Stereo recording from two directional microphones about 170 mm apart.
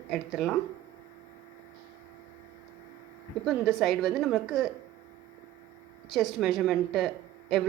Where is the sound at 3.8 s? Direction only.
Centre (ahead or behind).